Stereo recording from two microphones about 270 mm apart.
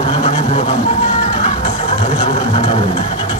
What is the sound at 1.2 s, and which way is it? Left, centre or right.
Music, left.